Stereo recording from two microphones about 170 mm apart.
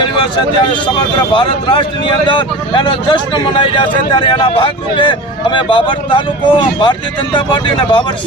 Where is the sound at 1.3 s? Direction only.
30° left (ahead or behind).